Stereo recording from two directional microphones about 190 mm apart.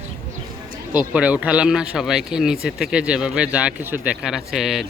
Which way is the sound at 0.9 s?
5° right (ahead or behind).